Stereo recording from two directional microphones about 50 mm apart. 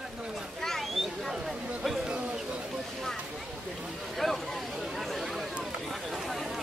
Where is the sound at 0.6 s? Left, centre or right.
Centre.